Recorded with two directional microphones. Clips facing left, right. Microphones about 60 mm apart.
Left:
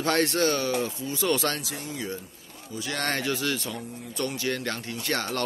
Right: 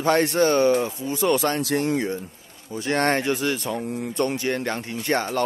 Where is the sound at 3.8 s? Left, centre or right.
Right.